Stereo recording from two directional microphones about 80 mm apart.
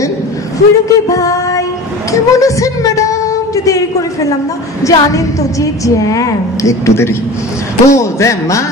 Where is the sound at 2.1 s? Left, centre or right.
Left.